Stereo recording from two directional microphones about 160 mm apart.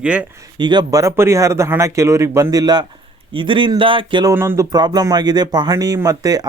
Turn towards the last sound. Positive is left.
turn(degrees=-25)  # may be behind; listen again after turning